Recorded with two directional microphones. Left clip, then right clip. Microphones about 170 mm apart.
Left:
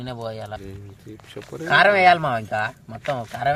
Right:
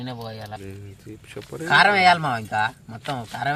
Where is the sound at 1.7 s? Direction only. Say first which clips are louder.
Left 1 dB; 60° left (ahead or behind).